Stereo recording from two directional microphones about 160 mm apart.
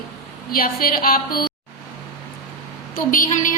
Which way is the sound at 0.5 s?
65° left (ahead or behind).